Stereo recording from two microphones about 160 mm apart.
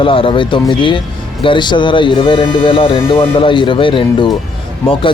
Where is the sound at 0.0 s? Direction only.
35° left (ahead or behind).